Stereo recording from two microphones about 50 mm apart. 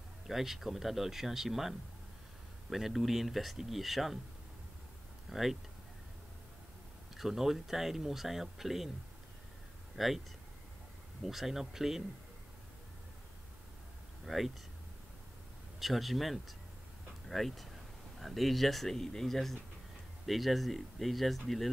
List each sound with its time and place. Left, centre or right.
0.3 s speech: centre
5.3 s speech: centre
7.2 s speech: centre
9.9 s speech: centre
11.2 s speech: centre
14.2 s speech: centre
15.8 s speech: centre